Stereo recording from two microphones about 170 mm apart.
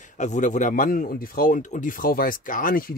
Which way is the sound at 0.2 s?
45° left (ahead or behind).